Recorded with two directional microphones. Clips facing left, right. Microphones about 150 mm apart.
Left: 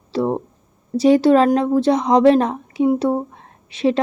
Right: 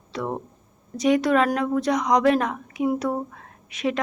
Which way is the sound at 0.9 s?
30° left (ahead or behind).